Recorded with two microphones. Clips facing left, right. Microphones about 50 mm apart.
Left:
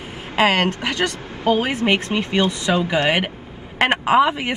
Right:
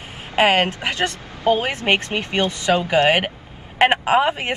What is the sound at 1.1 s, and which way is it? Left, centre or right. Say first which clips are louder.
Vehicle: right 1 dB; left.